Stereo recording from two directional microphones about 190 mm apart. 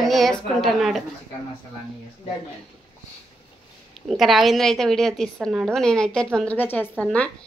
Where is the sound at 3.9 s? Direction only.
Centre (ahead or behind).